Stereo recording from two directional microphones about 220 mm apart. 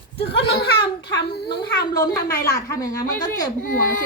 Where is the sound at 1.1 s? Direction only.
50° left (ahead or behind).